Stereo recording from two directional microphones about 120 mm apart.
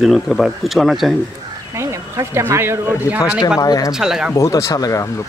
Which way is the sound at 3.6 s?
30° left (ahead or behind).